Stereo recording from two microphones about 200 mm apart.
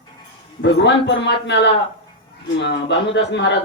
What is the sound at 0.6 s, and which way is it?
A man's voice, 60° left (ahead or behind).